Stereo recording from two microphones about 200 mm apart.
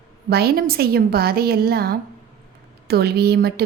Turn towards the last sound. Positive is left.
turn(degrees=-55)  # may be behind; listen again after turning